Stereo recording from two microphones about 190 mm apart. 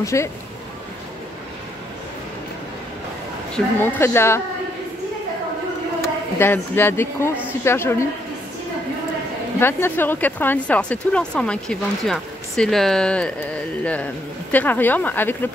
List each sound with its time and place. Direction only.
0.0 s speech: 15° left (ahead or behind)
3.5 s speech: 10° left (ahead or behind)
6.3 s speech: 10° left (ahead or behind)
9.6 s speech: 10° left (ahead or behind)
14.5 s speech: 10° left (ahead or behind)